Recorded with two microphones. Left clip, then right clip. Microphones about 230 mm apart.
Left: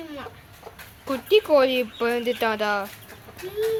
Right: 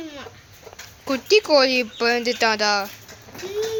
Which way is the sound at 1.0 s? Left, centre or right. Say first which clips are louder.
Right 2 dB; right.